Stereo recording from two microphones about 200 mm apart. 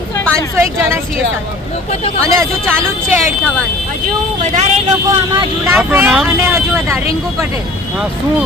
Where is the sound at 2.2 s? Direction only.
15° right (ahead or behind).